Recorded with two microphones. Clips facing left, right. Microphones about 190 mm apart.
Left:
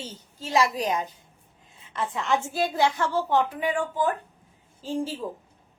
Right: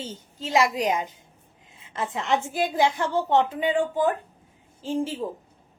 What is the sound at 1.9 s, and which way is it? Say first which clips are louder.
A woman's voice: right 1 dB; 20° right (ahead or behind).